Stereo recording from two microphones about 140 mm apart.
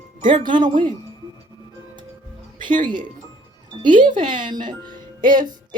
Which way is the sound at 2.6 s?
70° right (ahead or behind).